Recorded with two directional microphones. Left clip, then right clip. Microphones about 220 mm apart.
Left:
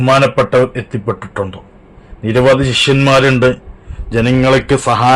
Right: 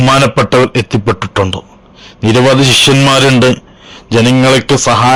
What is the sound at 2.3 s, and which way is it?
A man's voice, 45° right (ahead or behind).